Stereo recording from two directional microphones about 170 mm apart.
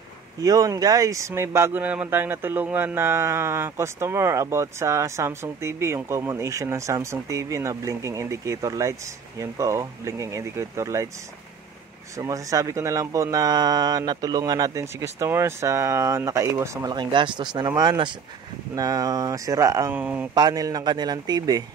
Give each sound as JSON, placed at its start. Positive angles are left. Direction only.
{"t": 0.4, "sound": "speech", "side_deg": -20}
{"t": 12.2, "sound": "speech", "side_deg": -20}
{"t": 20.3, "sound": "speech", "side_deg": -25}